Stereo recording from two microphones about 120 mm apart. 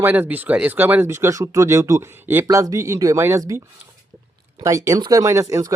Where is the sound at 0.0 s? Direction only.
15° right (ahead or behind).